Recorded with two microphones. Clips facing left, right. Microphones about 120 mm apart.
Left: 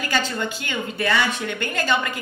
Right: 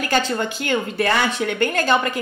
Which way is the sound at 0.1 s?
45° right (ahead or behind).